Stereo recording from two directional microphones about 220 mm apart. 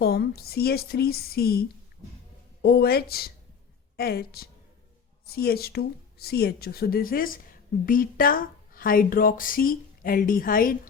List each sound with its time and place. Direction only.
0.0 s speech: 45° left (ahead or behind)